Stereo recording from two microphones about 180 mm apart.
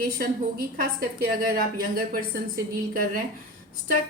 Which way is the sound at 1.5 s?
55° right (ahead or behind).